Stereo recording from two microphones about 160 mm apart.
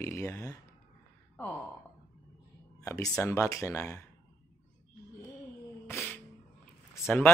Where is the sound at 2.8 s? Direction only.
20° left (ahead or behind).